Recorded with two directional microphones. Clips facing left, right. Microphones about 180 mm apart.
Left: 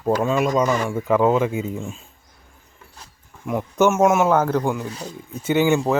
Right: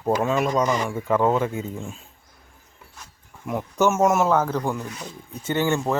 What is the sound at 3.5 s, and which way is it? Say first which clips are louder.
Speech: left 3 dB; centre (ahead or behind).